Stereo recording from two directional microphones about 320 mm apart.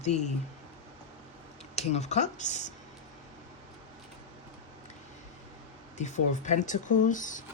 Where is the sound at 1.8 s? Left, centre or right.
Centre.